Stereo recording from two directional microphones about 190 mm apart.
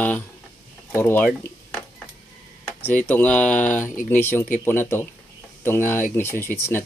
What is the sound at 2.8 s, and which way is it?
Speech, 10° left (ahead or behind).